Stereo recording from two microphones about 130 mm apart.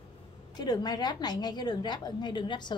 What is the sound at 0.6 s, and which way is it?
A woman's voice, 30° left (ahead or behind).